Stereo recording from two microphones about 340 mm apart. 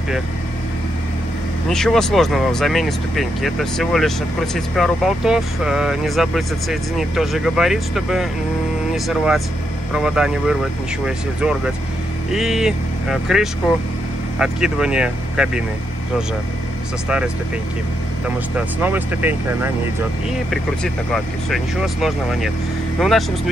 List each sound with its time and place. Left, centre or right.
1.7 s speech: centre
18.8 s speech: centre
20.8 s speech: centre